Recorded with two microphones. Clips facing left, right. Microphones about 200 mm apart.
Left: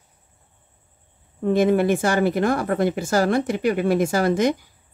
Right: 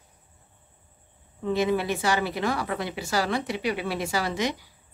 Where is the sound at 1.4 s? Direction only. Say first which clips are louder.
Left 7 dB; 50° left (ahead or behind).